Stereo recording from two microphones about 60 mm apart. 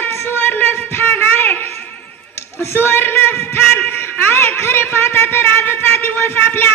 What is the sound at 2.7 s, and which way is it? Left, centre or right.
Speech, left.